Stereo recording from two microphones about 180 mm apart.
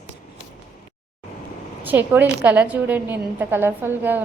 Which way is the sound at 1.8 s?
10° right (ahead or behind).